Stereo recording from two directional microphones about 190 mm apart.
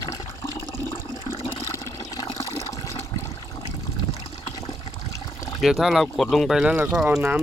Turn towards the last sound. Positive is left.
turn(degrees=-10)  # may be behind; listen again after turning